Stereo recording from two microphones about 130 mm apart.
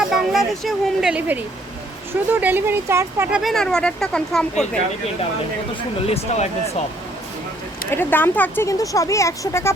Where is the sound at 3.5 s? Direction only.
5° left (ahead or behind).